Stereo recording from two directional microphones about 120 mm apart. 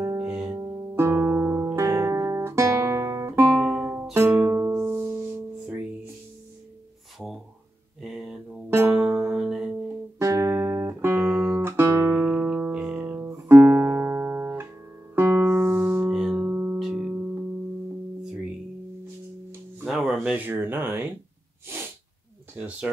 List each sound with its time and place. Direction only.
0.0 s music: 25° right (ahead or behind)
0.3 s music: 10° right (ahead or behind)
0.6 s music: 20° right (ahead or behind)
1.8 s guitar: 25° right (ahead or behind)
3.5 s music: 5° right (ahead or behind)
8.0 s a sound: 5° right (ahead or behind)
8.6 s music: 20° right (ahead or behind)
10.1 s music: 25° right (ahead or behind)
11.2 s music: 10° right (ahead or behind)
16.4 s music: 15° right (ahead or behind)
16.7 s music: 5° right (ahead or behind)
19.8 s music: 5° right (ahead or behind)
20.3 s a sound: 20° right (ahead or behind)
22.6 s a sound: 10° right (ahead or behind)